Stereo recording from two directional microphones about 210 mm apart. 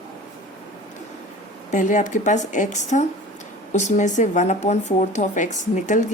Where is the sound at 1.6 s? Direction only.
35° left (ahead or behind).